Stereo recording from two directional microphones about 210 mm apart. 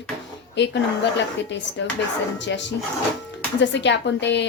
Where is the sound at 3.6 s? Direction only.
55° left (ahead or behind).